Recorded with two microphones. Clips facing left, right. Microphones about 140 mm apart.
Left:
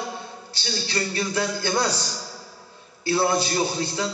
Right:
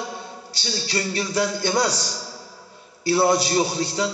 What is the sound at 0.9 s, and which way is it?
Speech, 30° right (ahead or behind).